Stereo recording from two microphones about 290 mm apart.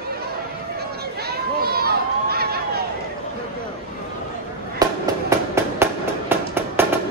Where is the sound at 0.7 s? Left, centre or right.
Right.